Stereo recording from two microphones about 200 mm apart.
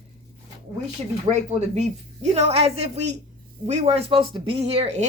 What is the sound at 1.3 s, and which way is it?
A woman's voice, 35° right (ahead or behind).